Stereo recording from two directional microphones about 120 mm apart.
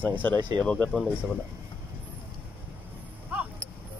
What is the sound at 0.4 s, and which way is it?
Speech, 35° right (ahead or behind).